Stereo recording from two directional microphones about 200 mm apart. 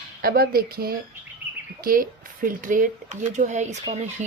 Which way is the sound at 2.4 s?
40° right (ahead or behind).